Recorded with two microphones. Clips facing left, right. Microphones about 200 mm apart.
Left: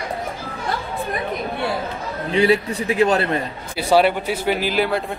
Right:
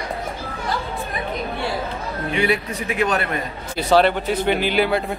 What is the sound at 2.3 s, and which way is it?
Speech, 30° left (ahead or behind).